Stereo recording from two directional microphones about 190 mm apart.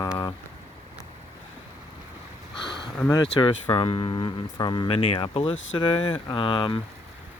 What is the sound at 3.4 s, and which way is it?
Speech, 25° left (ahead or behind).